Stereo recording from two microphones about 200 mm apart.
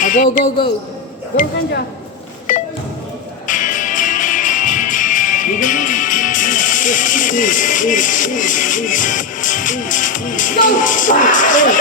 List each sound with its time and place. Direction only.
0.0 s a woman's voice: 40° left (ahead or behind)
2.5 s music: 40° left (ahead or behind)